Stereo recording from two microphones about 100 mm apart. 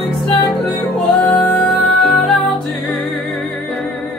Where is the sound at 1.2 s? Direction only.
15° left (ahead or behind).